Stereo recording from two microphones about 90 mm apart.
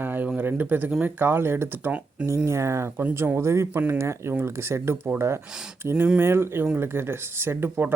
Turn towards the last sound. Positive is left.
turn(degrees=-25)  # may be behind; listen again after turning